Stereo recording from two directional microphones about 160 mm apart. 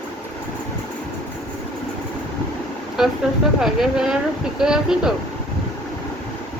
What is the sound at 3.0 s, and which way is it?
Vehicle, 5° right (ahead or behind).